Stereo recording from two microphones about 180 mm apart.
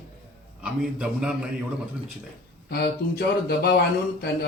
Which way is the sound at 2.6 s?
65° left (ahead or behind).